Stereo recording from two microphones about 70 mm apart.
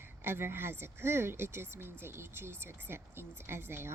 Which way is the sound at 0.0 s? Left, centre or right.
Right.